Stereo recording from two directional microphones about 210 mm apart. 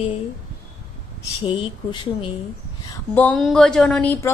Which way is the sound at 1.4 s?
25° left (ahead or behind).